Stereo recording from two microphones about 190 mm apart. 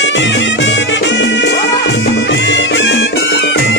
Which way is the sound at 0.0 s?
70° left (ahead or behind).